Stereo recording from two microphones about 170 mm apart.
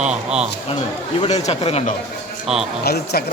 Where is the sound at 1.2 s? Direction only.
40° left (ahead or behind).